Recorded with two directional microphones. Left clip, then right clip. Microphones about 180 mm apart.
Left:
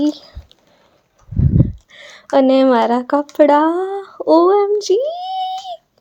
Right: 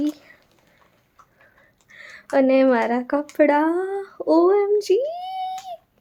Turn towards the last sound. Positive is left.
turn(degrees=25)  # may be behind; listen again after turning